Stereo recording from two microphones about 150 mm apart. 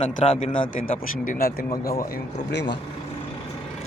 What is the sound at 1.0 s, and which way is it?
Speech, 65° left (ahead or behind).